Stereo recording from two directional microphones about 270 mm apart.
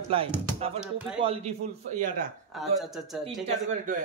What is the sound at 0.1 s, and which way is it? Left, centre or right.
A man's voice, centre.